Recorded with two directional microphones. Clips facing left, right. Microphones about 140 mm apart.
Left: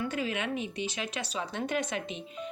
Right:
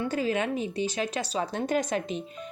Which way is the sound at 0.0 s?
40° right (ahead or behind).